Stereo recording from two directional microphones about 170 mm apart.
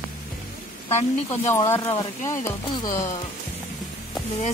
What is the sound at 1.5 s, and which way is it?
Speech, 15° left (ahead or behind).